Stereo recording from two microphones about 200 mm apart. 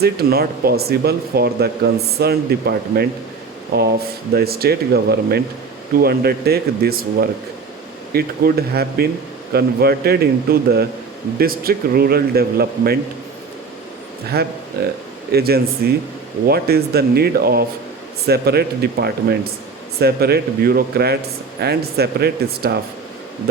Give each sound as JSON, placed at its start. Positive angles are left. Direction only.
{"t": 0.0, "sound": "speech", "side_deg": -50}
{"t": 14.3, "sound": "speech", "side_deg": -50}